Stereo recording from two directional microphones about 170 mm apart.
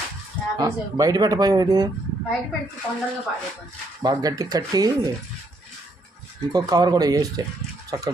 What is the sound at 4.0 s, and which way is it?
Speech, 20° right (ahead or behind).